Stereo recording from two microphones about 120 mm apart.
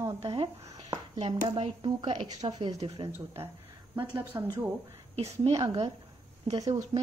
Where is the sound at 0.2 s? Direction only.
45° right (ahead or behind).